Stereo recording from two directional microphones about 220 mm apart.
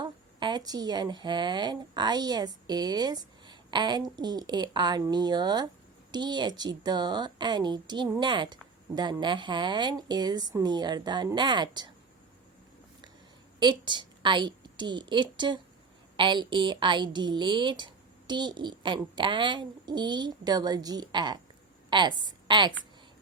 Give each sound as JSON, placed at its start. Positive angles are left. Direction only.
{"t": 0.0, "sound": "a woman's voice", "side_deg": -20}
{"t": 13.6, "sound": "a woman's voice", "side_deg": -20}